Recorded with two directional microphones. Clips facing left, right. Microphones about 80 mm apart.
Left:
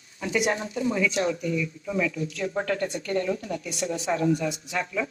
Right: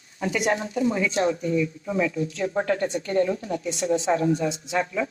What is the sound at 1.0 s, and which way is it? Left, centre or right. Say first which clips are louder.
Speech: right 2 dB; right.